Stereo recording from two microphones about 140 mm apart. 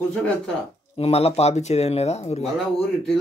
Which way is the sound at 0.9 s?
45° left (ahead or behind).